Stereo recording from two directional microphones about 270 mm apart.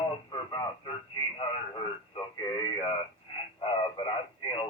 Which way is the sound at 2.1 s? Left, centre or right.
Centre.